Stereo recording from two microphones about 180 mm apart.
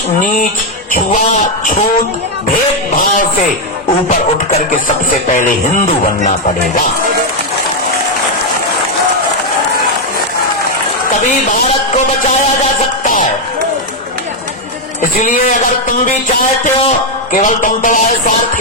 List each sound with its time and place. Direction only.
0.2 s music: 45° left (ahead or behind)
15.2 s music: 45° left (ahead or behind)
17.3 s music: 45° left (ahead or behind)